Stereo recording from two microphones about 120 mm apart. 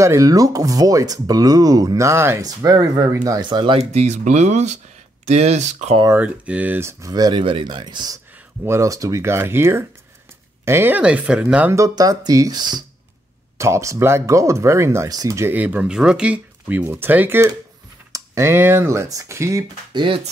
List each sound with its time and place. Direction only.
0.0 s speech: 25° right (ahead or behind)
3.7 s speech: 65° right (ahead or behind)
6.1 s speech: 10° right (ahead or behind); by 8.2 s 35° right (ahead or behind)
8.6 s speech: 25° right (ahead or behind)
11.7 s speech: 30° right (ahead or behind)
13.6 s speech: 25° right (ahead or behind)
19.9 s speech: 40° right (ahead or behind)